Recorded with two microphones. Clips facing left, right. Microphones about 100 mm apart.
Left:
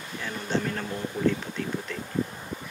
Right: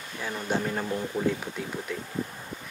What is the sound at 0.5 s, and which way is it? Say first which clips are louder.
Speech: right 1 dB; 10° right (ahead or behind).